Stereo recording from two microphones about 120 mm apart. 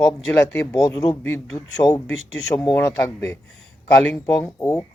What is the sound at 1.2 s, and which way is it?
Speech, 20° left (ahead or behind).